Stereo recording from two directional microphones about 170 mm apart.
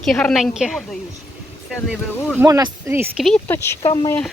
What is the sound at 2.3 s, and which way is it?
Speech, 20° right (ahead or behind).